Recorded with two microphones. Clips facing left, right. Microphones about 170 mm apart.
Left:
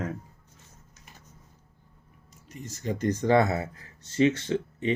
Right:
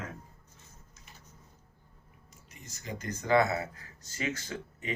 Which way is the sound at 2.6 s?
40° left (ahead or behind).